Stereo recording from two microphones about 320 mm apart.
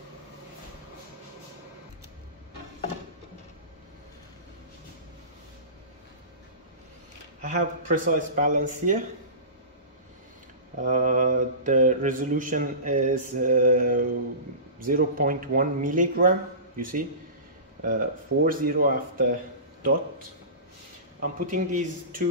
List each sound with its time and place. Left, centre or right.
7.4 s mantra: right
10.8 s mantra: right
21.2 s mantra: right